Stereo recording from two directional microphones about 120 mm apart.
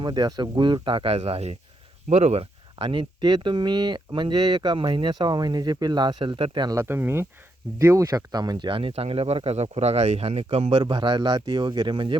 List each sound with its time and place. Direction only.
0.0 s speech: 35° right (ahead or behind)
6.7 s speech: 20° right (ahead or behind); by 10.8 s 55° right (ahead or behind)
10.8 s speech: 40° right (ahead or behind)